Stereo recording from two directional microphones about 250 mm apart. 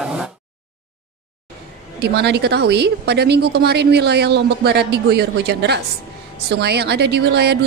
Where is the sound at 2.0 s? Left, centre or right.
Right.